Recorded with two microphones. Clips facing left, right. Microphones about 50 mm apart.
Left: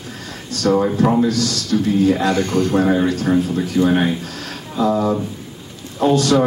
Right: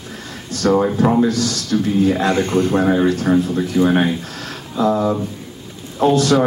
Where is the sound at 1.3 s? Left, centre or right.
Right.